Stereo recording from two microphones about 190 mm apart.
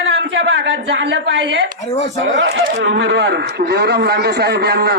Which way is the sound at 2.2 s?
65° right (ahead or behind).